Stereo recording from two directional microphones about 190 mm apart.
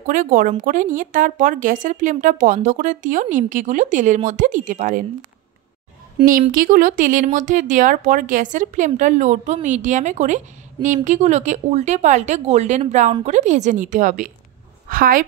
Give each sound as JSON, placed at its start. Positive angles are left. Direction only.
{"t": 0.0, "sound": "a woman's voice", "side_deg": -45}
{"t": 6.5, "sound": "a woman's voice", "side_deg": -45}